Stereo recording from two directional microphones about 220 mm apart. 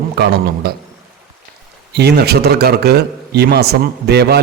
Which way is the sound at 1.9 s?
50° right (ahead or behind).